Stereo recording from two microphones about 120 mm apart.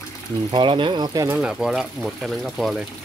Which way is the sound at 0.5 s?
45° right (ahead or behind).